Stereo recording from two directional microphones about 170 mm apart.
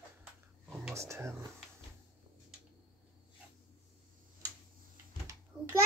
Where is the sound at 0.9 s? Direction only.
15° right (ahead or behind).